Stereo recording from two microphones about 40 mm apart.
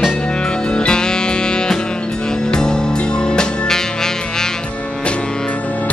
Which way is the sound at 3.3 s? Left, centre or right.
Centre.